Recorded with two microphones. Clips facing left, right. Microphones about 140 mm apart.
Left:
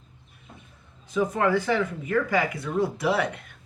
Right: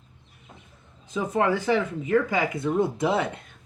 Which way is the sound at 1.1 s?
20° right (ahead or behind).